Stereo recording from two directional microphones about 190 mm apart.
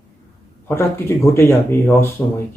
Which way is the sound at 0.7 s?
15° left (ahead or behind).